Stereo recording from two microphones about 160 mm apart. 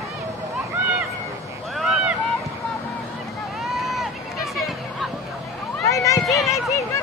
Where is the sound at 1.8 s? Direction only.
5° right (ahead or behind).